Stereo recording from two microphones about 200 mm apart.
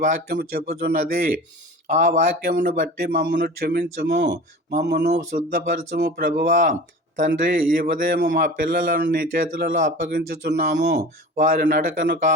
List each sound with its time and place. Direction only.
0.0 s a man's voice: 50° right (ahead or behind)